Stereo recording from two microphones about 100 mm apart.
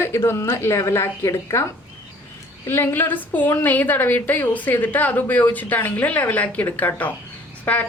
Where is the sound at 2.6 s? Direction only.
20° left (ahead or behind).